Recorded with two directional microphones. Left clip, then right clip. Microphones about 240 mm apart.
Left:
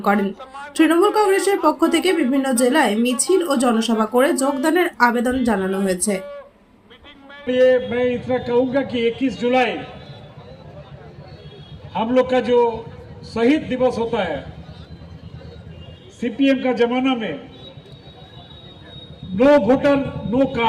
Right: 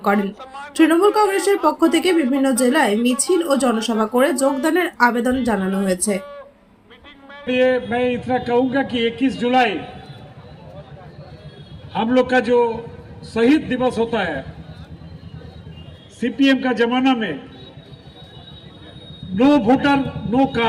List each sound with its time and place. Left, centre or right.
0.2 s a woman's voice: right
0.7 s speech: centre
5.5 s a woman's voice: right
5.8 s speech: centre
7.4 s speech: right
11.9 s speech: right
16.2 s speech: right
19.4 s speech: right